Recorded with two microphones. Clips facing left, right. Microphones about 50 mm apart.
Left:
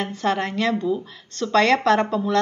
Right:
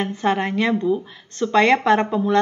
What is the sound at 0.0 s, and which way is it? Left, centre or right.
A woman's voice, centre.